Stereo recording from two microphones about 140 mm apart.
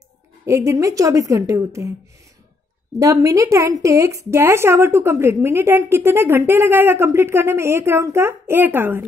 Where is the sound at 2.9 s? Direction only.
20° right (ahead or behind).